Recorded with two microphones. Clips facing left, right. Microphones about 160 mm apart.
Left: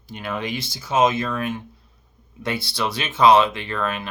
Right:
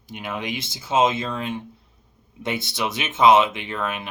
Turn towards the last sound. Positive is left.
turn(degrees=-20)  # may be behind; listen again after turning